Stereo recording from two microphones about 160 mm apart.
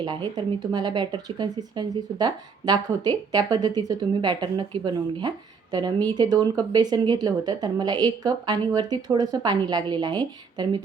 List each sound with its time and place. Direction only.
0.3 s speech: 25° right (ahead or behind)